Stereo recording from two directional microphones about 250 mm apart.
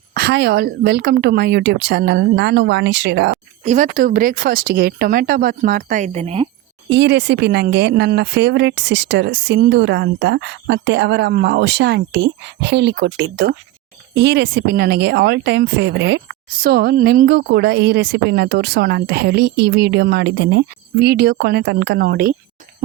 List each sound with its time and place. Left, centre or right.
0.1 s speech: right
3.7 s speech: right
6.9 s speech: right